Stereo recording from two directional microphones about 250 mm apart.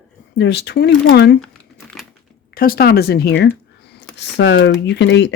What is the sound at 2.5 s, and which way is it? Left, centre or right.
Speech, left.